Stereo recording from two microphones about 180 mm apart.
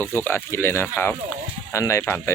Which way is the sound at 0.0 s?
10° left (ahead or behind).